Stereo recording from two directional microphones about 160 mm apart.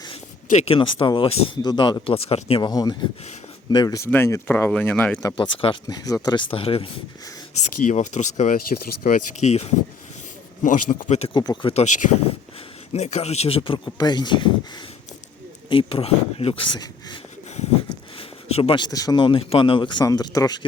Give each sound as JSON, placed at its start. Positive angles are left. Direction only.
{"t": 0.5, "sound": "speech", "side_deg": 40}
{"t": 2.6, "sound": "speech", "side_deg": 25}
{"t": 5.9, "sound": "speech", "side_deg": 20}
{"t": 6.5, "sound": "speech", "side_deg": 35}
{"t": 7.6, "sound": "speech", "side_deg": 45}
{"t": 8.5, "sound": "speech", "side_deg": 65}
{"t": 9.4, "sound": "speech", "side_deg": 40}
{"t": 10.6, "sound": "speech", "side_deg": 55}
{"t": 11.3, "sound": "speech", "side_deg": 30}
{"t": 11.7, "sound": "speech", "side_deg": 45}
{"t": 18.2, "sound": "speech", "side_deg": 40}